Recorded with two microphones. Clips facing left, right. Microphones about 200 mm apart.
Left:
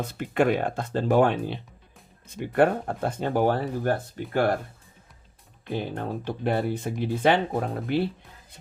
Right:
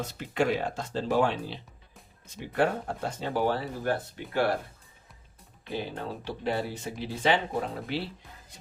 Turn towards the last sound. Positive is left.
turn(degrees=50)  # may be behind; listen again after turning